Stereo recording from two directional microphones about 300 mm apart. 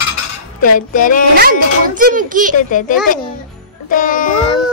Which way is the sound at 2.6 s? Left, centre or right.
Left.